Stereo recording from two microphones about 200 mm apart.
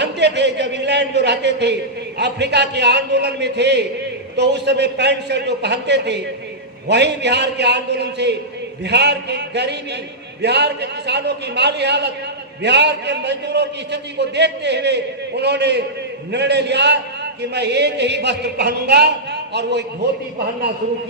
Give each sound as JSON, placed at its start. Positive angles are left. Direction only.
{"t": 0.0, "sound": "a man's voice", "side_deg": -60}